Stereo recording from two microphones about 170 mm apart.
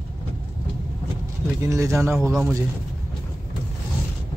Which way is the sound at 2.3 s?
Centre (ahead or behind).